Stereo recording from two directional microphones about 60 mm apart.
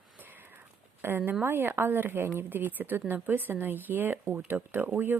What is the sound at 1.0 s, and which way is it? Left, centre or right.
Speech, right.